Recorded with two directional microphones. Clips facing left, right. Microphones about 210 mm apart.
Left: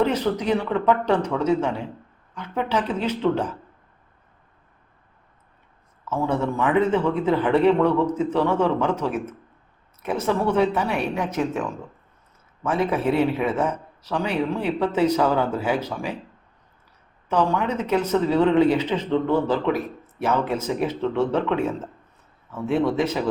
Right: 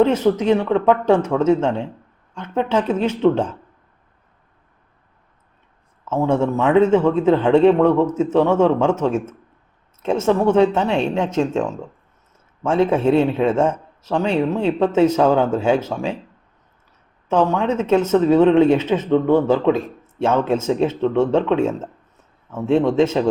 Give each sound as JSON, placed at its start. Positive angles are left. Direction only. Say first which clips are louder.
{"t": 0.0, "sound": "a man's voice", "louder": "right 6 dB", "side_deg": -25}
{"t": 6.2, "sound": "a man's voice", "louder": "right 5 dB", "side_deg": -25}
{"t": 17.2, "sound": "a man's voice", "louder": "right 4 dB", "side_deg": -25}